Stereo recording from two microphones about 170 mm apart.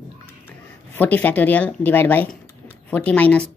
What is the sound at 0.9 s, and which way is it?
Speech, 10° left (ahead or behind).